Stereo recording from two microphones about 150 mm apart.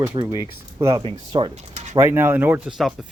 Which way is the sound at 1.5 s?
50° right (ahead or behind).